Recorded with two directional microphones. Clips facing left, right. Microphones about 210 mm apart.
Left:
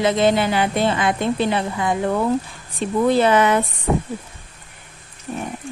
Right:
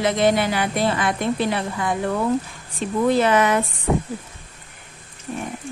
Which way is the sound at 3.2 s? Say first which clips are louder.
Left 3 dB; 25° left (ahead or behind).